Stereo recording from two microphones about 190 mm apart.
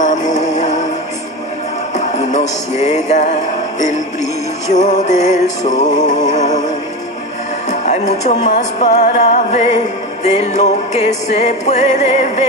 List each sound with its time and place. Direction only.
0.4 s music: 40° left (ahead or behind)
2.0 s music: 40° left (ahead or behind)
4.7 s music: 40° left (ahead or behind)
7.8 s music: 40° left (ahead or behind)